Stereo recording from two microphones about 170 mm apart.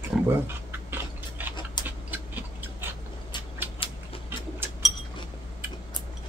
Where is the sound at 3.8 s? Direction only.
30° left (ahead or behind).